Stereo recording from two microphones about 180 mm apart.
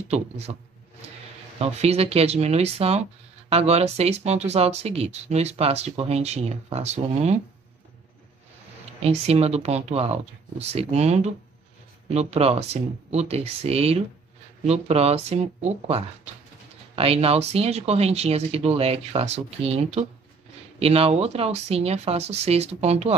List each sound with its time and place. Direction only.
0.1 s speech: 40° right (ahead or behind)
9.0 s speech: 35° right (ahead or behind)